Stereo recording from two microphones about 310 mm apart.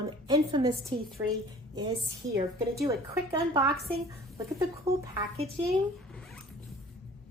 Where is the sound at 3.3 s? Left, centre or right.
Centre.